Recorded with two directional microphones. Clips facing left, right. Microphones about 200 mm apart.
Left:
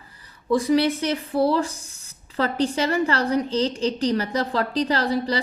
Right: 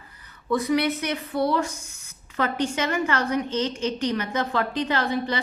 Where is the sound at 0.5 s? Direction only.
30° left (ahead or behind).